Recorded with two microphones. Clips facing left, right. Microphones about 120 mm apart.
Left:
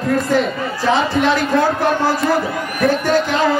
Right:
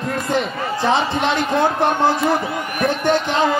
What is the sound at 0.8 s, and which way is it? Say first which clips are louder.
Speech: left 3 dB; 20° right (ahead or behind).